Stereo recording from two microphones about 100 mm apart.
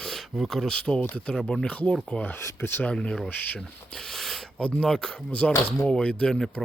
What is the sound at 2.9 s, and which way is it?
Speech, 10° left (ahead or behind).